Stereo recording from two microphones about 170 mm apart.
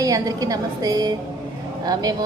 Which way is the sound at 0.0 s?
20° right (ahead or behind).